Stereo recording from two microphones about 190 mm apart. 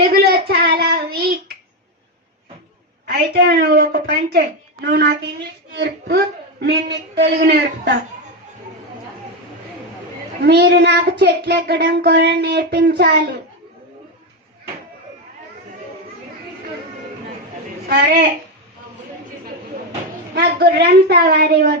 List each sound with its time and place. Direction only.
0.1 s child singing: 55° right (ahead or behind)
3.1 s a woman's voice: 60° right (ahead or behind)
10.4 s a woman's voice: 60° right (ahead or behind)
17.8 s a woman's voice: 60° right (ahead or behind)
20.3 s a woman's voice: 55° right (ahead or behind)